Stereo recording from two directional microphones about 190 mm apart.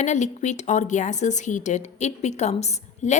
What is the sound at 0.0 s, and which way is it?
Speech, 40° left (ahead or behind).